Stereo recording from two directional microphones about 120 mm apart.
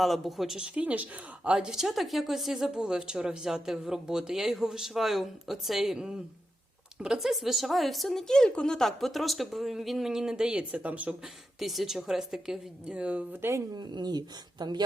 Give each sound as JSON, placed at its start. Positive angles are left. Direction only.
{"t": 0.0, "sound": "a woman's voice", "side_deg": 0}
{"t": 11.6, "sound": "a woman's voice", "side_deg": 0}
{"t": 13.7, "sound": "speech", "side_deg": -35}